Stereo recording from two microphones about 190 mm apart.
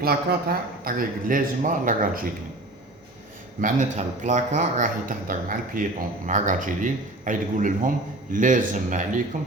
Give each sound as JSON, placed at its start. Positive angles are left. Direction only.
{"t": 0.0, "sound": "speech", "side_deg": -50}
{"t": 3.6, "sound": "speech", "side_deg": -40}